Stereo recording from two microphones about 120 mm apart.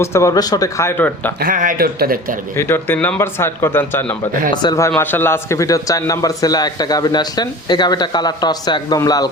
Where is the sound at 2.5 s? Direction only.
20° left (ahead or behind).